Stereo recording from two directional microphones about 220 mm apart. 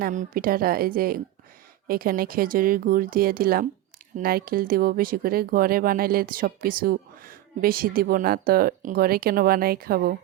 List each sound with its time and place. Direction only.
0.0 s speech: 40° right (ahead or behind)